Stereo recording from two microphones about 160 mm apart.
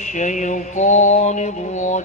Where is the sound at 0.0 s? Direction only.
50° left (ahead or behind).